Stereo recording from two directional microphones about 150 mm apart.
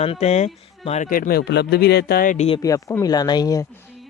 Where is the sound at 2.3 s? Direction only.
45° left (ahead or behind).